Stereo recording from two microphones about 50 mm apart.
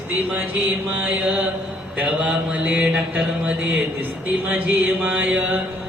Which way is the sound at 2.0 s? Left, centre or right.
Right.